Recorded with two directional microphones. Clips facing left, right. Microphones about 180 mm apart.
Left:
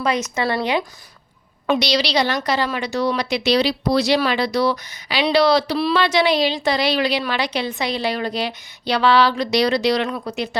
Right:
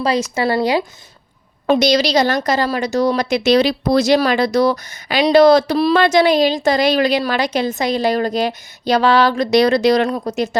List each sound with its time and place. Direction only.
0.0 s a woman's voice: 30° right (ahead or behind)